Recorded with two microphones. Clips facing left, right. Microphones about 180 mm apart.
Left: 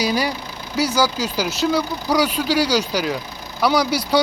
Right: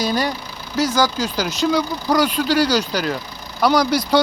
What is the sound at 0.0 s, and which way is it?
Speech, 10° left (ahead or behind).